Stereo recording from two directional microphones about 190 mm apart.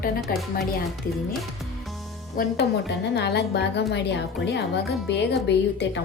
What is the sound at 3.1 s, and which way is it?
A woman's voice, 60° left (ahead or behind).